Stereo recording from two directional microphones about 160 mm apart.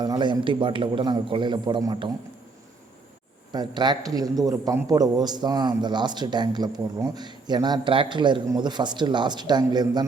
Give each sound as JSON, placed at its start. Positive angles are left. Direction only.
{"t": 0.0, "sound": "a man's voice", "side_deg": -30}
{"t": 3.5, "sound": "a man's voice", "side_deg": -25}